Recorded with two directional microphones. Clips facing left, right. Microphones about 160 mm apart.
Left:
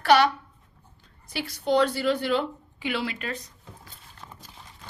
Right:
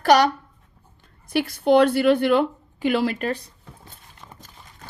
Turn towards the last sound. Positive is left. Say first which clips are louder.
# even
turn(degrees=0)  # may be behind; listen again after turning